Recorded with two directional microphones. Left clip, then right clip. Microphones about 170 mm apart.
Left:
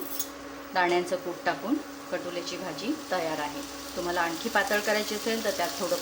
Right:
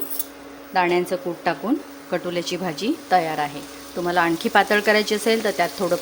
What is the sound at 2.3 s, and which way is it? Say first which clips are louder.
Speech: right 8 dB; 60° right (ahead or behind).